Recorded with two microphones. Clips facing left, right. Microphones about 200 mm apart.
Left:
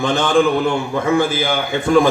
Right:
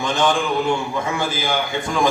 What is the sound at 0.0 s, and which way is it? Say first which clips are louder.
A man's voice: left 5 dB; 55° left (ahead or behind).